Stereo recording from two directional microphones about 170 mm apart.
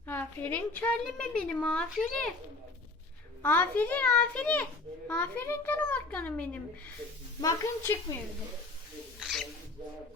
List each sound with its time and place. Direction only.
0.1 s a woman's voice: 10° left (ahead or behind)
3.4 s a child's voice: 10° left (ahead or behind)